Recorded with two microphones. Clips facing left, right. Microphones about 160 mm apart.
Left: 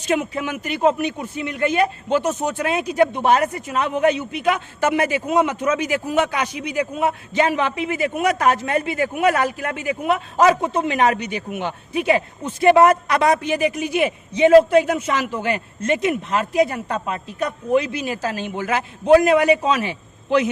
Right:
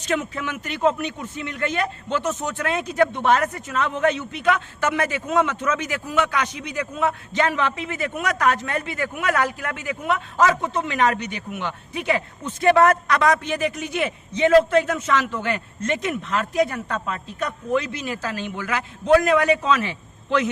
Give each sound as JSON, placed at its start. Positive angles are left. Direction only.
{"t": 0.1, "sound": "a man's voice", "side_deg": 20}